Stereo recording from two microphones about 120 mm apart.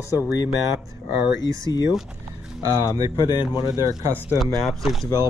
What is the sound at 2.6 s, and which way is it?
Speech, 30° right (ahead or behind).